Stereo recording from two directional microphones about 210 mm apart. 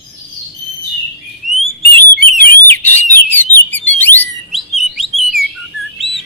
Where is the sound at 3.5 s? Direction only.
10° left (ahead or behind).